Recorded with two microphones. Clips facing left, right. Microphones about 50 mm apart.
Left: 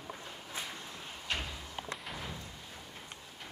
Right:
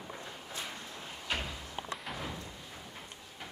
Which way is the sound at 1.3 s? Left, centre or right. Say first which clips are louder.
Right 1 dB; centre.